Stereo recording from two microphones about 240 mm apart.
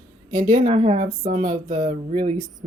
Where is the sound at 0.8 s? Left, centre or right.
Right.